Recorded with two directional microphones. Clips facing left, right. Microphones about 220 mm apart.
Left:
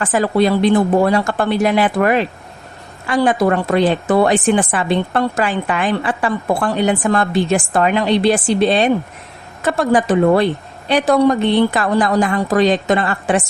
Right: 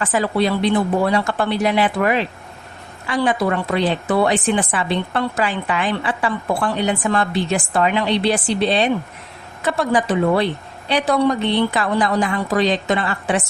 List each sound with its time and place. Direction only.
0.0 s a woman's voice: 50° left (ahead or behind)